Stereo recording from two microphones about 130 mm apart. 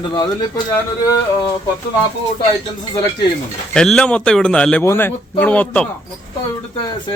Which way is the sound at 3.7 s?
5° left (ahead or behind).